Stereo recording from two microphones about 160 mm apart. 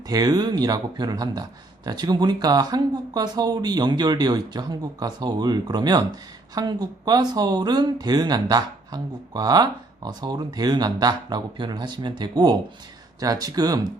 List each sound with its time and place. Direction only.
0.1 s speech: 25° right (ahead or behind)